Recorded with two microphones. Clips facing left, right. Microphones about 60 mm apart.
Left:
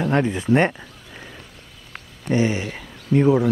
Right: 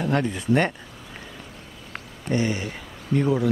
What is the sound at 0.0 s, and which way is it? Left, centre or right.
Speech, left.